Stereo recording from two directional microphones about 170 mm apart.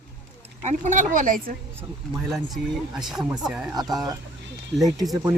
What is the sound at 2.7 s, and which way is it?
Speech, centre (ahead or behind).